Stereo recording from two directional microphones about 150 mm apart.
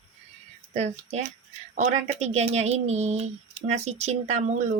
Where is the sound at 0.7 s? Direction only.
50° right (ahead or behind).